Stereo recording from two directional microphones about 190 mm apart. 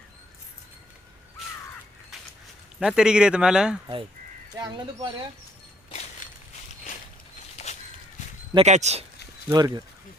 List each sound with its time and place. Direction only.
2.8 s speech: 5° right (ahead or behind)
7.7 s a sound: 35° left (ahead or behind)
8.5 s speech: 35° right (ahead or behind)
9.5 s speech: 20° right (ahead or behind)